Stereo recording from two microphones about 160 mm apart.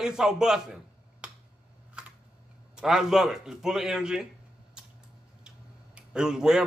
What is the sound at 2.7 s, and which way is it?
Speech, 5° right (ahead or behind).